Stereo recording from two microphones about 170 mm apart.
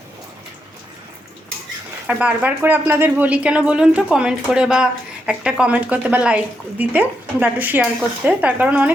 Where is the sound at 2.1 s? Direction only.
10° right (ahead or behind).